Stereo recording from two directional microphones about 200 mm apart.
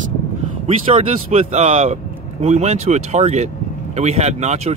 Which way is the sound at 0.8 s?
30° right (ahead or behind).